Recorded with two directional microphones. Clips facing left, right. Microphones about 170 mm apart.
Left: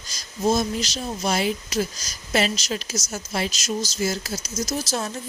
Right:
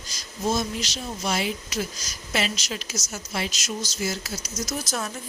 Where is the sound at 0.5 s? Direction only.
40° left (ahead or behind).